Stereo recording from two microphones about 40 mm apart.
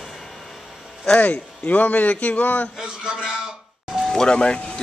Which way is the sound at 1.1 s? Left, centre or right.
Left.